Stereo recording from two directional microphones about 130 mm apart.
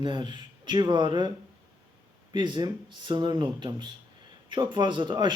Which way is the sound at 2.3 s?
35° right (ahead or behind).